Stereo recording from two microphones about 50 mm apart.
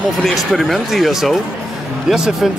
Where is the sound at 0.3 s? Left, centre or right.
Centre.